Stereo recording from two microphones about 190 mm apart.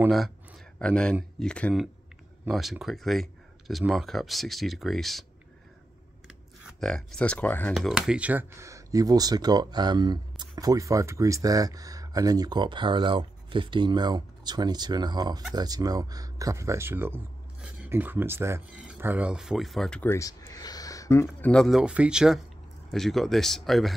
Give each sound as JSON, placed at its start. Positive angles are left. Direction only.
{"t": 0.0, "sound": "speech", "side_deg": 0}
{"t": 6.2, "sound": "computer keyboard", "side_deg": 0}
{"t": 7.7, "sound": "speech", "side_deg": 0}
{"t": 21.4, "sound": "speech", "side_deg": 5}